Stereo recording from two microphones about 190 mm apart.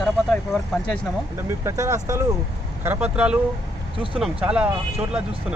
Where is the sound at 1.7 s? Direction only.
15° right (ahead or behind).